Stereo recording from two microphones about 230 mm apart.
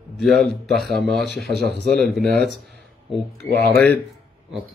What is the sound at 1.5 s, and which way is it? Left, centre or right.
Speech, right.